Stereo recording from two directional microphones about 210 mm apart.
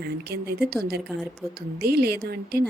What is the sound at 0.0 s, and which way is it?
A woman's voice, 50° right (ahead or behind).